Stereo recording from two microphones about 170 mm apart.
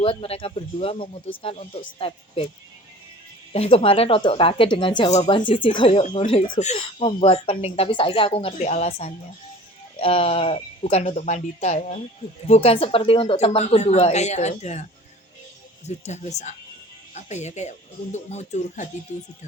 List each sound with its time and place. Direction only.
0.0 s speech: 35° left (ahead or behind)
3.5 s speech: 35° left (ahead or behind)
15.9 s speech: 40° left (ahead or behind)